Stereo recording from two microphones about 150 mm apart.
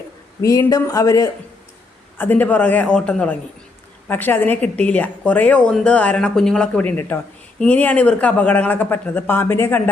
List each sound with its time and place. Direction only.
0.4 s a woman's voice: 20° left (ahead or behind)